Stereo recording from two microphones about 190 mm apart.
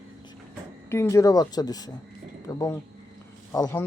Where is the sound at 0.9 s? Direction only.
15° left (ahead or behind).